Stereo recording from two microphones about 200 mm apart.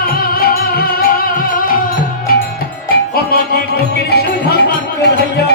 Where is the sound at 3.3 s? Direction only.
50° left (ahead or behind).